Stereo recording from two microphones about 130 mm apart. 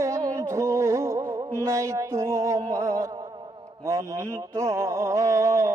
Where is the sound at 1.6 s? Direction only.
25° right (ahead or behind).